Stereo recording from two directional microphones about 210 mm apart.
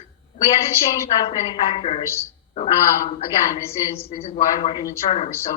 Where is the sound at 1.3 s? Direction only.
25° left (ahead or behind).